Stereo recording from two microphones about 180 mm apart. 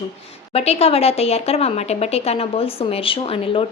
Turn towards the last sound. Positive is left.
turn(degrees=30)  # may be behind; listen again after turning